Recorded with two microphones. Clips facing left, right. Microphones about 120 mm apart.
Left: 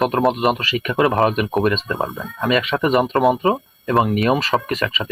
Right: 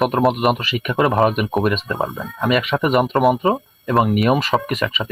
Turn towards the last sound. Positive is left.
turn(degrees=-10)  # may be behind; listen again after turning